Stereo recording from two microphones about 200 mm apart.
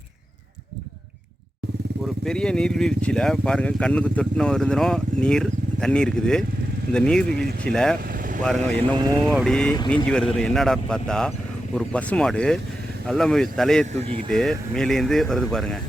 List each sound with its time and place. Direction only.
2.2 s speech: 5° left (ahead or behind)
8.0 s vehicle: 45° right (ahead or behind)
8.4 s speech: 5° left (ahead or behind)
8.8 s speech: 20° right (ahead or behind)
9.2 s speech: centre (ahead or behind)
14.0 s speech: 30° right (ahead or behind)
14.3 s speech: 5° left (ahead or behind)